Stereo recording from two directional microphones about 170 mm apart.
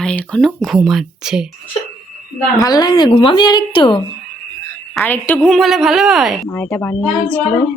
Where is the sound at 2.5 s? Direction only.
20° left (ahead or behind).